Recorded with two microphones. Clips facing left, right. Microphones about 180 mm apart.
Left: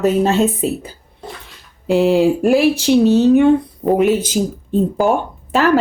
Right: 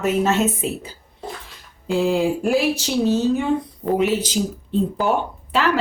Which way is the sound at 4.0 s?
50° left (ahead or behind).